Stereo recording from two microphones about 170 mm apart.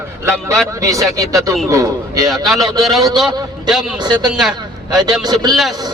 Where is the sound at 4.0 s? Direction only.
25° right (ahead or behind).